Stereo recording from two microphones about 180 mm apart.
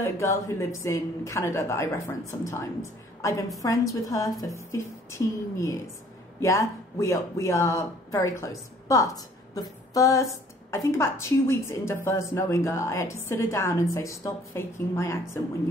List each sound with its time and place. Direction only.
0.0 s a woman's voice: 15° left (ahead or behind)
9.6 s a sound: 20° left (ahead or behind)
10.7 s a woman's voice: 15° left (ahead or behind)